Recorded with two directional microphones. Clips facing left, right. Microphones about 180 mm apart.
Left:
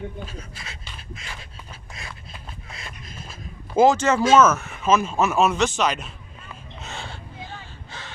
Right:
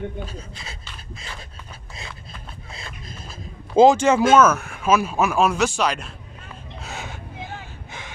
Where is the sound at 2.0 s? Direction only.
25° right (ahead or behind).